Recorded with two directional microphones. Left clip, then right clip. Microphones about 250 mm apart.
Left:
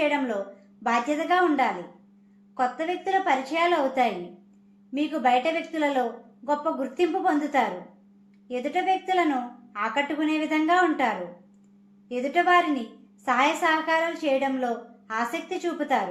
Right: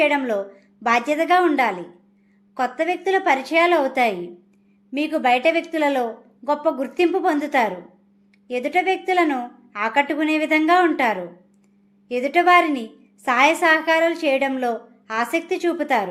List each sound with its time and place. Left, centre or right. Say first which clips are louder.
0.0 s a woman's voice: right 6 dB; right